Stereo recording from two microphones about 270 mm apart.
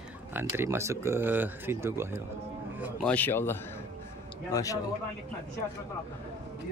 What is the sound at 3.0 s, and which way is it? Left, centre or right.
Speech, centre.